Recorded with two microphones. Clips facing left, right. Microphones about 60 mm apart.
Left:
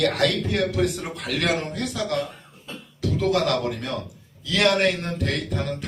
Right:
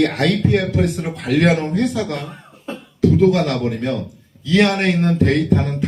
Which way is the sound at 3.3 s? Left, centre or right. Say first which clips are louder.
Right 3 dB; right.